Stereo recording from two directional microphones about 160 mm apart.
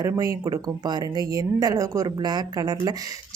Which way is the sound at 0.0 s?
20° right (ahead or behind).